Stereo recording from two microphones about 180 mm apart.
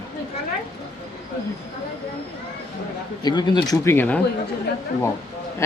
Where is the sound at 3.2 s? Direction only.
25° left (ahead or behind).